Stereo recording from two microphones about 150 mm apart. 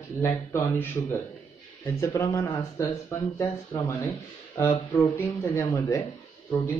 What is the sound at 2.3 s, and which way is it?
Speech, 20° left (ahead or behind).